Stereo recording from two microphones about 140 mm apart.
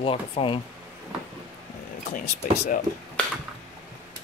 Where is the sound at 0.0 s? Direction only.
40° left (ahead or behind).